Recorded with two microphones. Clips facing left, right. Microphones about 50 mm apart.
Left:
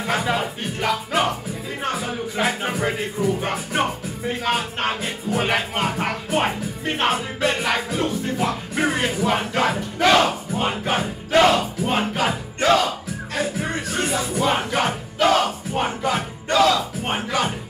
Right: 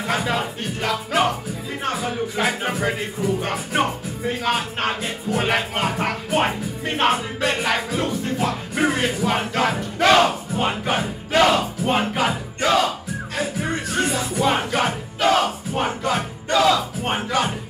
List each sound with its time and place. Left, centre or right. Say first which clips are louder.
0.0 s music: even; centre
13.4 s music: even; centre